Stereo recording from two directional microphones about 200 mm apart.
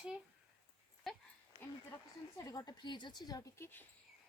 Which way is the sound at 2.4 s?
20° left (ahead or behind).